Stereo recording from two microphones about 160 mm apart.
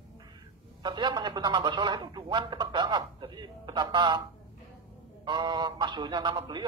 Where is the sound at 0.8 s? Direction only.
30° right (ahead or behind).